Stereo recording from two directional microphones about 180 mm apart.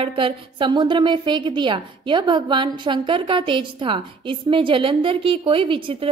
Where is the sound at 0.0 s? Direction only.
30° right (ahead or behind).